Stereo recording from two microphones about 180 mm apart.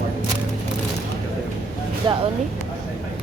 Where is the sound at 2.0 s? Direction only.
25° right (ahead or behind).